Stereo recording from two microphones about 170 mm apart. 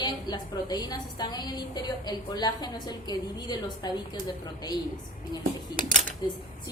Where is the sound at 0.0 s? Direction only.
25° left (ahead or behind).